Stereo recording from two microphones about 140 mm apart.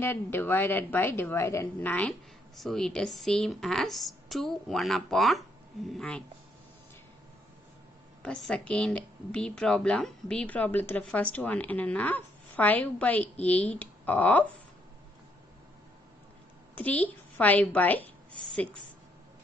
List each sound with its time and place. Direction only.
0.0 s a woman's voice: 15° left (ahead or behind)
8.2 s speech: 5° left (ahead or behind)
16.7 s a woman's voice: 10° left (ahead or behind)